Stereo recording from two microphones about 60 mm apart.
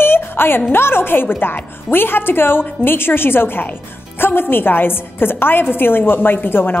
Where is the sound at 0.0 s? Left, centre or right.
Left.